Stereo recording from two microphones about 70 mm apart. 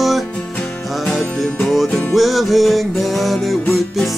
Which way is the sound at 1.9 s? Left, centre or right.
Centre.